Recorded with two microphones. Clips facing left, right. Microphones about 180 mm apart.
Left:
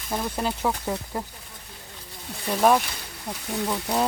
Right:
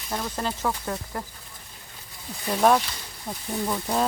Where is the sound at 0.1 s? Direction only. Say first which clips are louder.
Left 2 dB; 10° left (ahead or behind).